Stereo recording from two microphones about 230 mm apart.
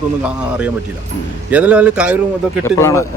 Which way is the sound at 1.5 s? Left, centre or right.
Centre.